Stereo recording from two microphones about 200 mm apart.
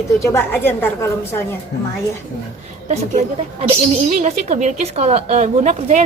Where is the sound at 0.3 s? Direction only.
10° left (ahead or behind).